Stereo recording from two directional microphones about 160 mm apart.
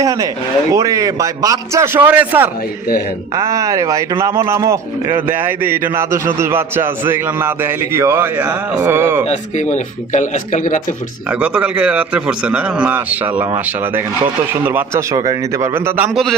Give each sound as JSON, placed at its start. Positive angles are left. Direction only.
{"t": 0.0, "sound": "a man's voice", "side_deg": -20}
{"t": 9.2, "sound": "speech", "side_deg": 45}
{"t": 11.3, "sound": "speech", "side_deg": -5}
{"t": 15.1, "sound": "speech", "side_deg": -25}